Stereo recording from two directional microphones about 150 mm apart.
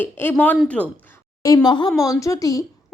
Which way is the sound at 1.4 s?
25° left (ahead or behind).